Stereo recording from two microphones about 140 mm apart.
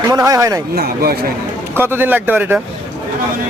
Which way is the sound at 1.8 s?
15° right (ahead or behind).